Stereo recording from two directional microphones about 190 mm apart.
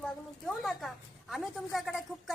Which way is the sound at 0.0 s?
Centre (ahead or behind).